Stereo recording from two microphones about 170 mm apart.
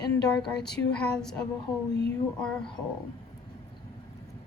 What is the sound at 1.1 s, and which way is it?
Speech, 5° left (ahead or behind).